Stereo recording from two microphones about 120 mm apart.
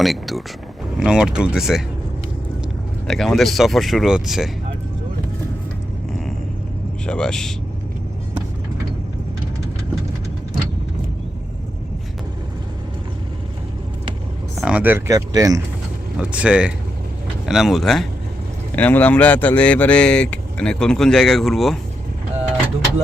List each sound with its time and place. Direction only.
0.0 s speech: centre (ahead or behind)
3.1 s speech: centre (ahead or behind)
7.1 s speech: 5° left (ahead or behind)
14.6 s speech: 10° right (ahead or behind); by 15.6 s 30° right (ahead or behind)
16.1 s speech: 10° right (ahead or behind)
18.8 s speech: 15° left (ahead or behind)